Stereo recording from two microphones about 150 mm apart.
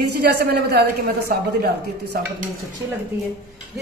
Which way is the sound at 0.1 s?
90° right.